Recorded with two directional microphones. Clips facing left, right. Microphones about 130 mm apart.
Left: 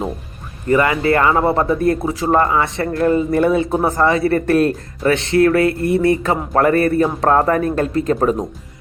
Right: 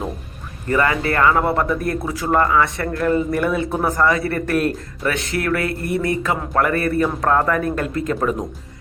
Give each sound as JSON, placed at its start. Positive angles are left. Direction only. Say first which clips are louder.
{"t": 0.7, "sound": "a man's voice", "louder": "left 4 dB", "side_deg": 25}